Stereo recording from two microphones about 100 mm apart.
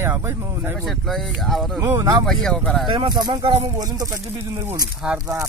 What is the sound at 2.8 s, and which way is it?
Speech, 50° right (ahead or behind).